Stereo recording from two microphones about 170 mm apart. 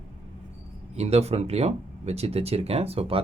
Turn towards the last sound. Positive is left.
turn(degrees=-35)  # may be behind; listen again after turning